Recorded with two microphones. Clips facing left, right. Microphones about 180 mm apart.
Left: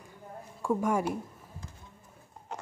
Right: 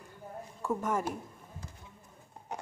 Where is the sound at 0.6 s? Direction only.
10° left (ahead or behind).